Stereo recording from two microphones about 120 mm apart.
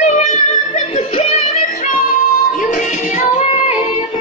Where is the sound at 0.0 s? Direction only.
75° left (ahead or behind); by 2.0 s 60° left (ahead or behind).